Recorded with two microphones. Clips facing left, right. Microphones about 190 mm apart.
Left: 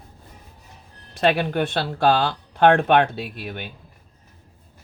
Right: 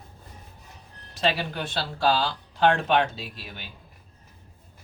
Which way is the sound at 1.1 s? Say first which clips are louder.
Left 7 dB; 55° left (ahead or behind).